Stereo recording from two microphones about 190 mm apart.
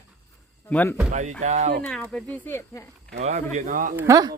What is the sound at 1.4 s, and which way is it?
Speech, 35° right (ahead or behind).